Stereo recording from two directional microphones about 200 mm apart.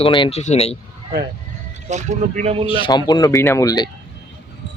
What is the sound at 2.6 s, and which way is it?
Speech, 25° left (ahead or behind).